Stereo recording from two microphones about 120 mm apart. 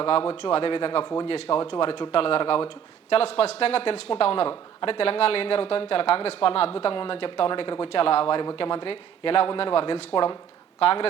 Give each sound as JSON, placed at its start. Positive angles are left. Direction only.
{"t": 0.0, "sound": "a man's voice", "side_deg": 45}